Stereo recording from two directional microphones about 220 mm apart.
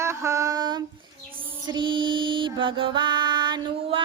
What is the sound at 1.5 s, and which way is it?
Music, 20° right (ahead or behind).